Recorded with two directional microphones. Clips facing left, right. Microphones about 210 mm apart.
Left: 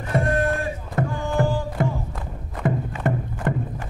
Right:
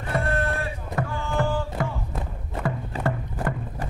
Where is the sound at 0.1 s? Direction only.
15° left (ahead or behind).